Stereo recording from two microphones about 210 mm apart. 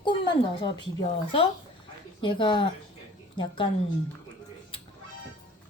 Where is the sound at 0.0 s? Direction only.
20° left (ahead or behind).